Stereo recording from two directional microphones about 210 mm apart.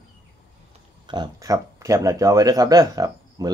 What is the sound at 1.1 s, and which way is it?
A man's voice, 20° right (ahead or behind).